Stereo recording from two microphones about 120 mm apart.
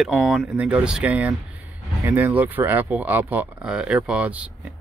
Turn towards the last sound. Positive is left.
turn(degrees=-10)  # may be behind; listen again after turning